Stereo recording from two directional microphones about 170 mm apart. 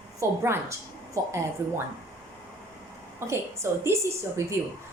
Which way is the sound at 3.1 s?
15° right (ahead or behind).